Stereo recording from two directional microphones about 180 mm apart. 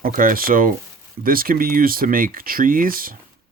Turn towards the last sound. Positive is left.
turn(degrees=-50)  # may be behind; listen again after turning